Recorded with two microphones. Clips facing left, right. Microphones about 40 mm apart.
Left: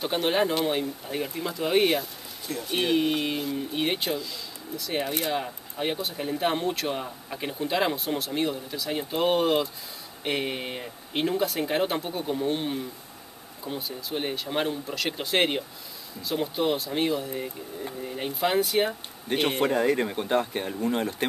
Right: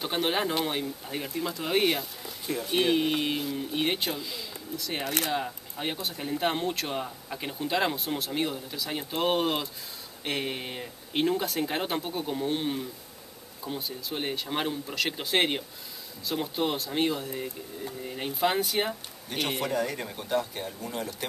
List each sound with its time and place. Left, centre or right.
0.0 s speech: centre
19.2 s speech: left